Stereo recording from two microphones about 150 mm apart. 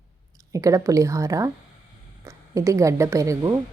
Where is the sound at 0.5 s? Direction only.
20° right (ahead or behind).